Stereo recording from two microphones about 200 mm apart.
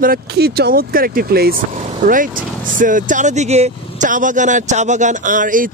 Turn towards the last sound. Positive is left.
turn(degrees=-40)  # may be behind; listen again after turning